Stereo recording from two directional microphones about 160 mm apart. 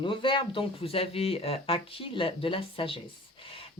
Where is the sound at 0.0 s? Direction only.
30° left (ahead or behind).